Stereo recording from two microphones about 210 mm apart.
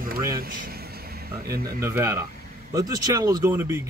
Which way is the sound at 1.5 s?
10° right (ahead or behind).